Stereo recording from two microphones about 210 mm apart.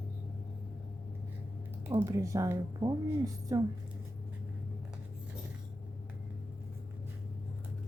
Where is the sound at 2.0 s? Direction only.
15° right (ahead or behind).